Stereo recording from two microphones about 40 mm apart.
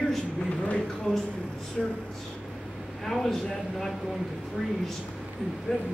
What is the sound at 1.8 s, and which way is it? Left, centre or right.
Speech, centre.